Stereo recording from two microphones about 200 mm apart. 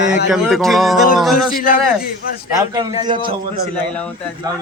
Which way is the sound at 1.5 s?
45° left (ahead or behind).